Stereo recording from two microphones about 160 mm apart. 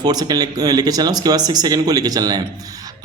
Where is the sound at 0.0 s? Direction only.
25° right (ahead or behind).